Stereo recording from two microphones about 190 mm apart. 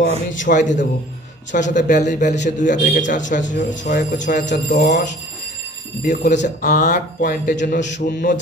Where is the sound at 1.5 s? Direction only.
40° left (ahead or behind).